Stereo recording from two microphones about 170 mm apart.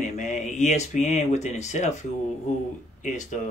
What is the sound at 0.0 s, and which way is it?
Speech, 45° left (ahead or behind).